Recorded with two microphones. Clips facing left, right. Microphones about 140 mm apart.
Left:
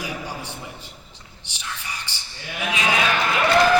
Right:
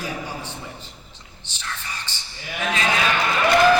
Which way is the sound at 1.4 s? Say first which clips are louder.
Right 1 dB; 15° left (ahead or behind).